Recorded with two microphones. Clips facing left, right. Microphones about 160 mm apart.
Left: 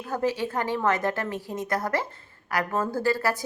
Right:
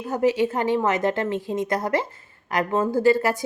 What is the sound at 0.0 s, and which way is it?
Speech, 15° right (ahead or behind).